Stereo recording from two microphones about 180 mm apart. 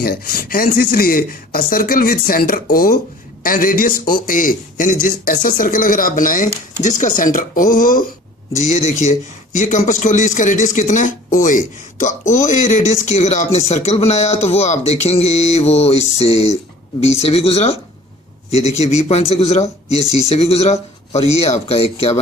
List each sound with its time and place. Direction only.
0.0 s a man's voice: 60° left (ahead or behind)
9.6 s a man's voice: 40° left (ahead or behind)